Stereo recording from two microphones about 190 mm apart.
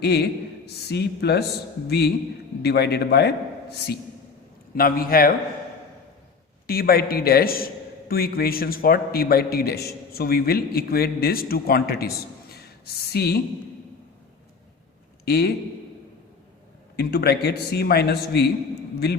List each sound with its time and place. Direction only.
0.0 s a man's voice: 60° left (ahead or behind)
2.6 s a man's voice: 60° left (ahead or behind)
6.7 s a man's voice: 55° left (ahead or behind)
15.2 s a man's voice: 55° left (ahead or behind)
17.0 s a man's voice: 55° left (ahead or behind)